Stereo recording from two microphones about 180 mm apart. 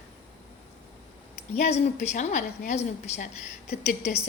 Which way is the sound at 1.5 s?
35° left (ahead or behind).